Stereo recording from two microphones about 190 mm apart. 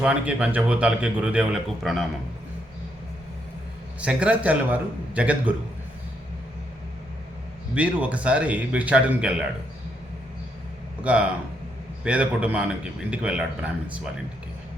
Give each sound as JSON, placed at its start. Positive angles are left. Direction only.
{"t": 0.0, "sound": "a man's voice", "side_deg": -5}
{"t": 4.0, "sound": "a man's voice", "side_deg": -5}
{"t": 7.8, "sound": "a man's voice", "side_deg": -5}
{"t": 11.0, "sound": "a man's voice", "side_deg": -5}